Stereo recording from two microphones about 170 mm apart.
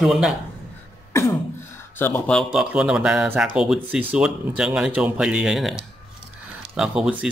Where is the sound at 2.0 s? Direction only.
10° left (ahead or behind).